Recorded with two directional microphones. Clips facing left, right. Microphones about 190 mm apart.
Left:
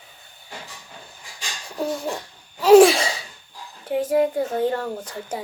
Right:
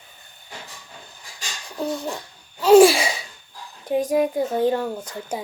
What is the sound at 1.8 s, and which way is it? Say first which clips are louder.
Bird: left 1 dB; 5° left (ahead or behind).